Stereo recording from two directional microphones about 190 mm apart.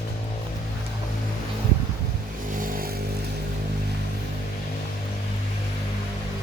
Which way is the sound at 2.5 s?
45° right (ahead or behind).